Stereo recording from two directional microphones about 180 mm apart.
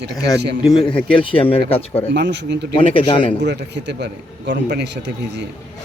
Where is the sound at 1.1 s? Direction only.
30° left (ahead or behind).